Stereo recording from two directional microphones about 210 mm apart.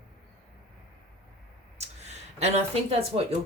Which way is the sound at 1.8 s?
30° right (ahead or behind).